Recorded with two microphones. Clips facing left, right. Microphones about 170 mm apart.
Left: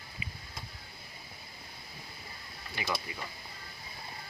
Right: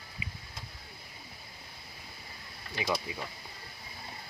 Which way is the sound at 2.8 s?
15° right (ahead or behind).